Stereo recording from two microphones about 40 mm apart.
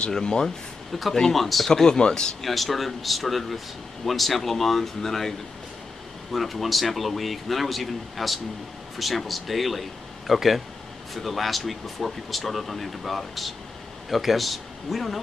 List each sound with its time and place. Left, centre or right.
0.1 s speech: centre
0.9 s speech: centre
1.7 s speech: centre
2.4 s speech: centre
6.3 s speech: centre